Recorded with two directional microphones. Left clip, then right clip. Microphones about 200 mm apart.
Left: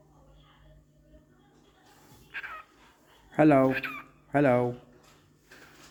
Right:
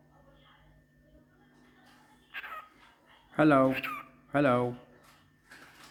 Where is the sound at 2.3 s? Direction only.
15° right (ahead or behind).